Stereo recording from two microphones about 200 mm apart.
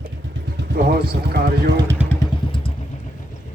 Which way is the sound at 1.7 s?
15° right (ahead or behind).